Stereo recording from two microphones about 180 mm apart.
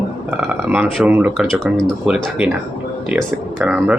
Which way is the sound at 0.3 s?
5° right (ahead or behind).